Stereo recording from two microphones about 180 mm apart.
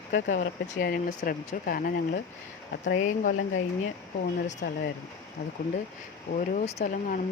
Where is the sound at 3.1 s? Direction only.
45° left (ahead or behind).